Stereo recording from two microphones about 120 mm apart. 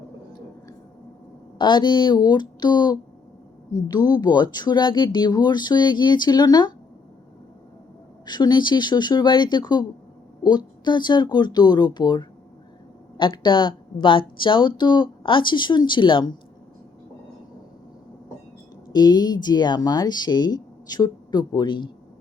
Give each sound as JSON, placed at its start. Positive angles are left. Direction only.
{"t": 1.5, "sound": "speech", "side_deg": 40}
{"t": 8.2, "sound": "speech", "side_deg": 35}
{"t": 18.9, "sound": "speech", "side_deg": 35}